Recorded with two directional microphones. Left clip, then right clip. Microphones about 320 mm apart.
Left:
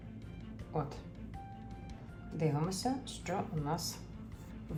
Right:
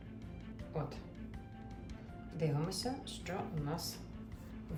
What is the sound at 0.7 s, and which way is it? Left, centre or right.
Speech, centre.